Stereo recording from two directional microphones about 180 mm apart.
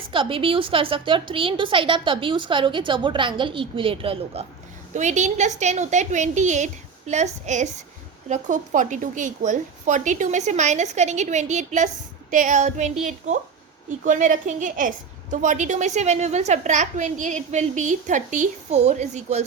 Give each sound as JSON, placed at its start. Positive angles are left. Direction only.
{"t": 0.1, "sound": "a woman's voice", "side_deg": -30}